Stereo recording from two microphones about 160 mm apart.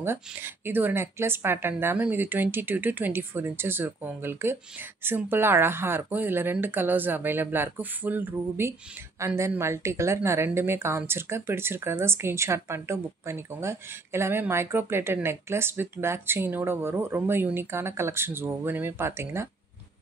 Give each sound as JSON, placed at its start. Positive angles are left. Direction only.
{"t": 0.0, "sound": "a woman's voice", "side_deg": -15}